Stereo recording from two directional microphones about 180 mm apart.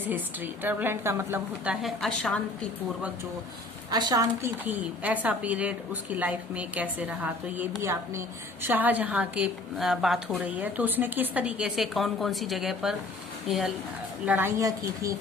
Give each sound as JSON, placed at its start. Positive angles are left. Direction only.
{"t": 0.0, "sound": "a woman's voice", "side_deg": -10}
{"t": 3.9, "sound": "a woman's voice", "side_deg": -20}